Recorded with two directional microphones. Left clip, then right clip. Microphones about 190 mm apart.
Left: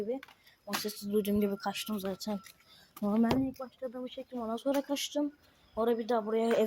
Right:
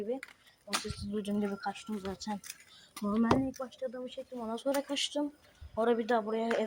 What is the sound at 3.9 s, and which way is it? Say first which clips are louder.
Speech: left 1 dB; centre (ahead or behind).